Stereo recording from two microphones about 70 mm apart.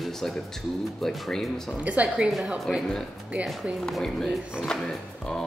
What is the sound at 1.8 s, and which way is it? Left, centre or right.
Speech, centre.